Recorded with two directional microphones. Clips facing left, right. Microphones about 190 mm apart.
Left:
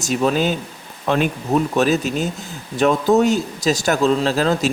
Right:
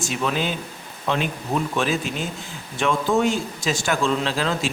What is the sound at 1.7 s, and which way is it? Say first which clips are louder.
Speech: left 6 dB; 40° left (ahead or behind).